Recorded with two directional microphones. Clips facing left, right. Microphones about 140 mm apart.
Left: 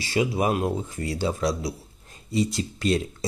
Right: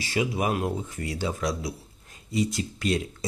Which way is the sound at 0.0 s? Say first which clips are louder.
Left 3 dB; 30° left (ahead or behind).